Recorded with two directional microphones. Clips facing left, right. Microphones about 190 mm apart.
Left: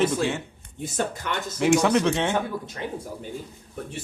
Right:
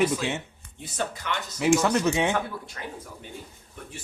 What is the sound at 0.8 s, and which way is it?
Speech, 50° left (ahead or behind).